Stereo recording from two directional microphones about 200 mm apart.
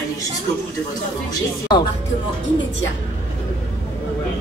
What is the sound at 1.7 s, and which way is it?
Music, 20° left (ahead or behind).